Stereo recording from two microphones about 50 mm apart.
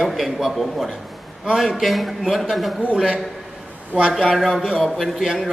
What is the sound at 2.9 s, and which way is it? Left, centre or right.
A man's voice, right.